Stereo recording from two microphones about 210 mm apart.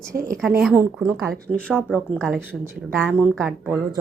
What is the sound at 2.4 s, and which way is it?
Speech, 10° right (ahead or behind).